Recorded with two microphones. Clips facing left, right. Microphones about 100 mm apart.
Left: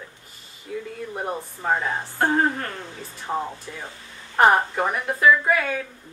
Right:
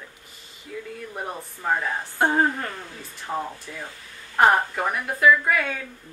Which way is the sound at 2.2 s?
5° right (ahead or behind).